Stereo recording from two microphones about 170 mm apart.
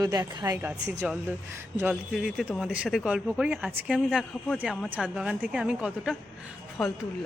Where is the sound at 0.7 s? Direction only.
5° right (ahead or behind).